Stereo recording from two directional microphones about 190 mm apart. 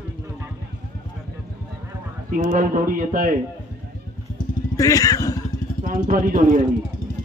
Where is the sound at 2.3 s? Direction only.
45° right (ahead or behind).